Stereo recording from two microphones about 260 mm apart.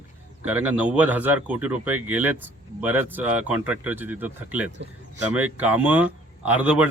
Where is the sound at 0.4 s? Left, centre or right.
Centre.